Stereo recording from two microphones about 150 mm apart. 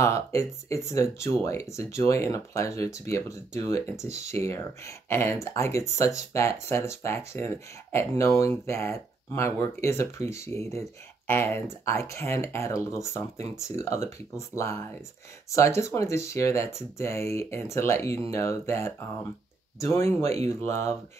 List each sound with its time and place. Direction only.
0.0 s speech: 20° left (ahead or behind)